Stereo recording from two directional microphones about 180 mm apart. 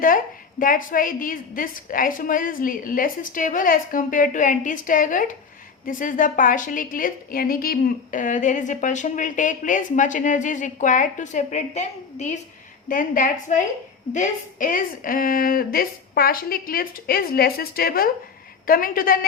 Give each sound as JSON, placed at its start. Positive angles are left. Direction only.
{"t": 0.6, "sound": "a woman's voice", "side_deg": 50}